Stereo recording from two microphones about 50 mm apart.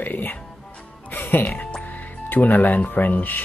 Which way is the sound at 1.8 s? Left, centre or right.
Left.